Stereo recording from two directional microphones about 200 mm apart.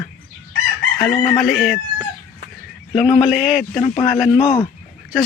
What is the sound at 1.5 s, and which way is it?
Speech, centre (ahead or behind).